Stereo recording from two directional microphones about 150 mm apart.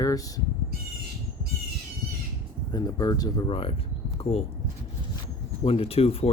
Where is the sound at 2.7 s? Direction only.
25° left (ahead or behind).